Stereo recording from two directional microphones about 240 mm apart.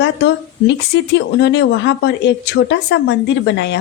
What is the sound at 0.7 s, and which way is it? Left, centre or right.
A woman's voice, left.